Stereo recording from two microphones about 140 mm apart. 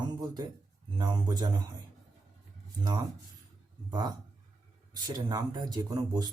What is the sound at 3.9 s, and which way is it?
Speech, 30° right (ahead or behind).